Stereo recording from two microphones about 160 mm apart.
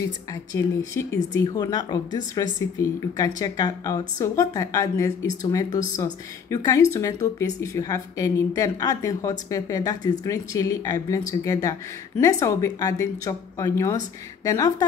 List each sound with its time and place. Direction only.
0.0 s speech: 20° left (ahead or behind)